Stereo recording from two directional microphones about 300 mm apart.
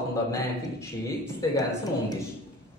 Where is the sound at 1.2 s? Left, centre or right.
Centre.